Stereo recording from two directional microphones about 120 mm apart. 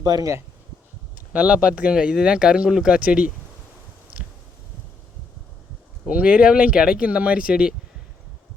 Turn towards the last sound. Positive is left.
turn(degrees=-5)  # may be behind; listen again after turning